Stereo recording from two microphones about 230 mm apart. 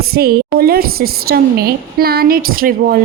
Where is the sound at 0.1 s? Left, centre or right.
Right.